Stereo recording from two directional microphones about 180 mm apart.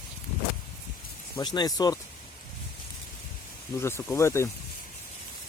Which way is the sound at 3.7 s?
15° left (ahead or behind).